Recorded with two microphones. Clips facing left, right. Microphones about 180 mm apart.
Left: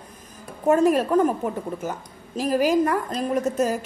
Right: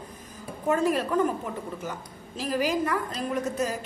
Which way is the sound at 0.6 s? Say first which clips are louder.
Left 6 dB; 45° left (ahead or behind).